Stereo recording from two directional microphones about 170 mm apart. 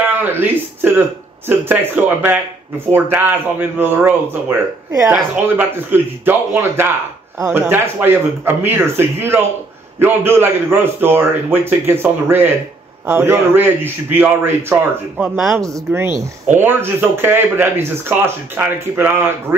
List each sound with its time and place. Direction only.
0.2 s a sound: 10° right (ahead or behind)
1.6 s speech: 10° right (ahead or behind)
15.2 s speech: centre (ahead or behind)
15.6 s speech: 15° right (ahead or behind)